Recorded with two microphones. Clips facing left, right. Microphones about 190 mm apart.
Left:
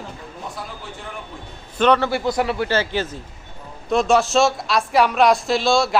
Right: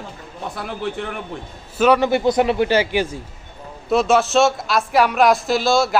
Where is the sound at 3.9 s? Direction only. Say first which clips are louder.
Right 1 dB; centre (ahead or behind).